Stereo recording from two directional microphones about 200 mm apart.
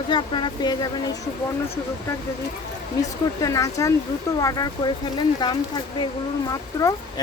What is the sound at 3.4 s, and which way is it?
Speech, 15° left (ahead or behind).